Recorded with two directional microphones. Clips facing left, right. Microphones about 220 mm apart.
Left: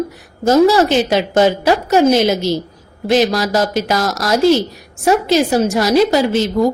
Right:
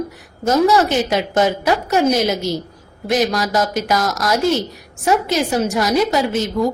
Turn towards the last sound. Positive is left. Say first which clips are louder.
# left 4 dB
turn(degrees=30)  # may be behind; listen again after turning